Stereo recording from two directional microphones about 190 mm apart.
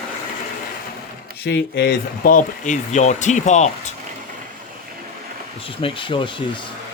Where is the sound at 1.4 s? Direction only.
60° left (ahead or behind); by 3.9 s 35° left (ahead or behind).